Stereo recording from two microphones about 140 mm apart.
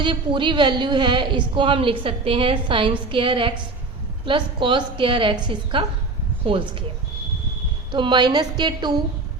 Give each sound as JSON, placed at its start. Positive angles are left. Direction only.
{"t": 0.0, "sound": "a woman's voice", "side_deg": -35}
{"t": 7.9, "sound": "a woman's voice", "side_deg": -35}